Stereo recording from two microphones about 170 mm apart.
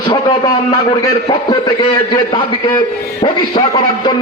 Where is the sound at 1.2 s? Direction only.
30° left (ahead or behind).